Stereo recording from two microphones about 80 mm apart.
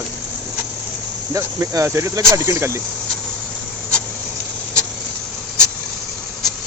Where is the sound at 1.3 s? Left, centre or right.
Right.